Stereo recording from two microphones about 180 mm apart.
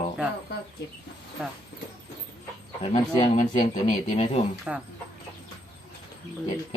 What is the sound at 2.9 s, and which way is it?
Speech, 35° left (ahead or behind).